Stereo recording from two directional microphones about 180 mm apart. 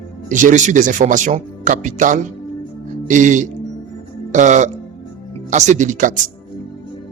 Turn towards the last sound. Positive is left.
turn(degrees=-45)  # may be behind; listen again after turning